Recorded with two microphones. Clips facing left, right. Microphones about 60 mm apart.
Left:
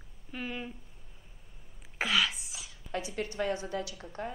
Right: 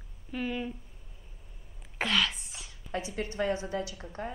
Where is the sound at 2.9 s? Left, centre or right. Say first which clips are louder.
Right 1 dB; right.